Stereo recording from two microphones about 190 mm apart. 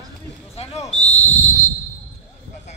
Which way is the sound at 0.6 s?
35° left (ahead or behind).